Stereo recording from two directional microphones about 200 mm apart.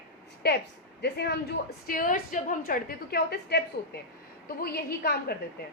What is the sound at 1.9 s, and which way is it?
A woman's voice, 45° left (ahead or behind).